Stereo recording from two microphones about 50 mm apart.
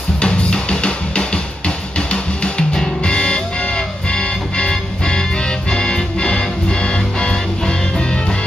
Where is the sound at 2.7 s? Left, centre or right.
Centre.